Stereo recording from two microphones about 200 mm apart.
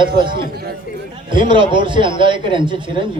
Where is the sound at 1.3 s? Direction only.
25° right (ahead or behind).